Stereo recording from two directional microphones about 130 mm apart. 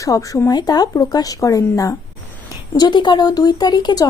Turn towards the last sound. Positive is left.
turn(degrees=30)  # may be behind; listen again after turning